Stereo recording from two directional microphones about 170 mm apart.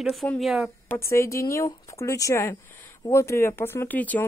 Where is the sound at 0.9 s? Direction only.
15° left (ahead or behind).